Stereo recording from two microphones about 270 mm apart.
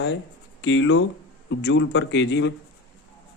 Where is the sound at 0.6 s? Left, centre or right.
Left.